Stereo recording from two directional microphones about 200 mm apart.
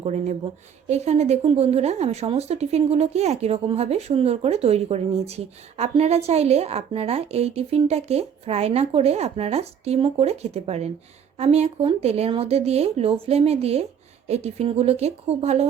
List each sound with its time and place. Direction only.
0.0 s speech: 35° right (ahead or behind)